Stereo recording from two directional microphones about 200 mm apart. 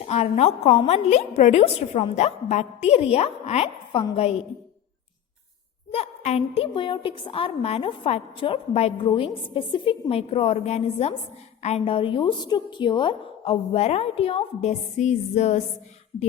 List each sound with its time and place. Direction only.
0.0 s a woman's voice: 30° left (ahead or behind)
5.9 s a woman's voice: 30° left (ahead or behind)